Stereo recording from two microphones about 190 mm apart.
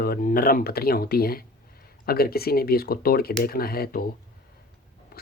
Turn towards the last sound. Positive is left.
turn(degrees=55)  # may be behind; listen again after turning